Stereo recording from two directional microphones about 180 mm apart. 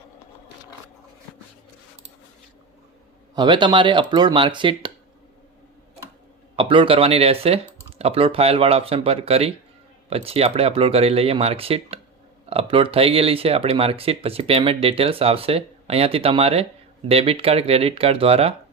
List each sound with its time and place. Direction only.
3.3 s speech: 25° right (ahead or behind)
6.6 s speech: 30° right (ahead or behind)